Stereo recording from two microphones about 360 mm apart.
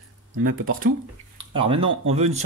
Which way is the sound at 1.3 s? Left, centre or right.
Centre.